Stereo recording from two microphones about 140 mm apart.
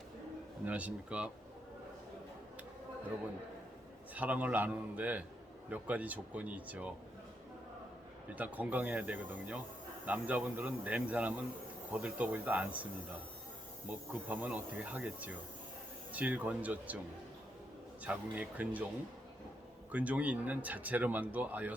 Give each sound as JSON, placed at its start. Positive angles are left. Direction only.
{"t": 0.6, "sound": "speech", "side_deg": -10}
{"t": 4.1, "sound": "speech", "side_deg": -10}
{"t": 8.4, "sound": "speech", "side_deg": -10}
{"t": 18.0, "sound": "speech", "side_deg": -10}
{"t": 19.9, "sound": "speech", "side_deg": -10}